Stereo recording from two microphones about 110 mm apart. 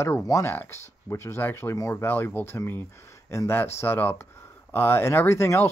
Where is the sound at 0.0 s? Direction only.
25° left (ahead or behind).